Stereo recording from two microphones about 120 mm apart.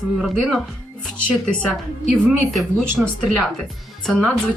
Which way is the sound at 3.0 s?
5° right (ahead or behind).